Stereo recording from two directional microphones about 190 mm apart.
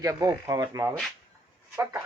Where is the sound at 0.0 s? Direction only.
15° right (ahead or behind).